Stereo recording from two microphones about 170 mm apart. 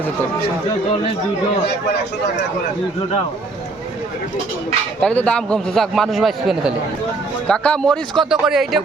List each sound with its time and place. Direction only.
4.9 s a man's voice: 5° left (ahead or behind)